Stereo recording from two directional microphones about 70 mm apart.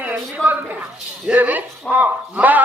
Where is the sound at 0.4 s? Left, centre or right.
Centre.